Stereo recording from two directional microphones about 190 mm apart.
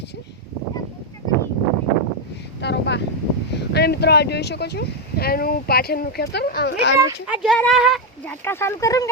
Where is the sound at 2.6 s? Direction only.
65° left (ahead or behind).